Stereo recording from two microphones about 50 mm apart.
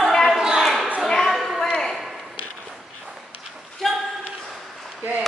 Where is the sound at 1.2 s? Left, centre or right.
Centre.